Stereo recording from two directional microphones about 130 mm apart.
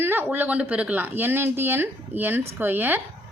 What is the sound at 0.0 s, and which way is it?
Speech, 15° right (ahead or behind).